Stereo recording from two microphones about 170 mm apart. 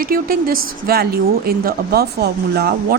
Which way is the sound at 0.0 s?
60° right (ahead or behind).